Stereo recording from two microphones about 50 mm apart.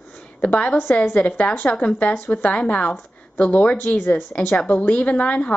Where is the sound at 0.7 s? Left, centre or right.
Left.